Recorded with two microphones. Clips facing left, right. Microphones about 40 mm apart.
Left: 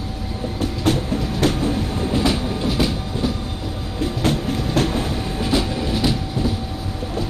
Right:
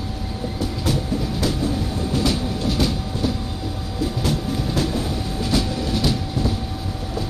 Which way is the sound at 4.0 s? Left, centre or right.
Left.